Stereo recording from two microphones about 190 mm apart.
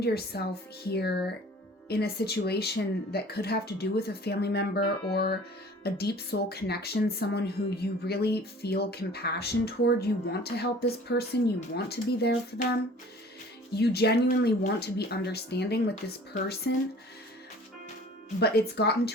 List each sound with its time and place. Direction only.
0.0 s speech: 55° left (ahead or behind)
18.3 s speech: 55° left (ahead or behind)